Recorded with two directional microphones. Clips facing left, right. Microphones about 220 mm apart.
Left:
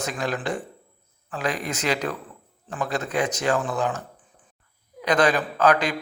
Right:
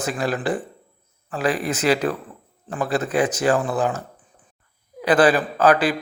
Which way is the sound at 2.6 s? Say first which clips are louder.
Right 4 dB; 35° right (ahead or behind).